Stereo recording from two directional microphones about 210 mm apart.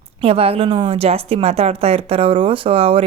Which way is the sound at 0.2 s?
25° right (ahead or behind).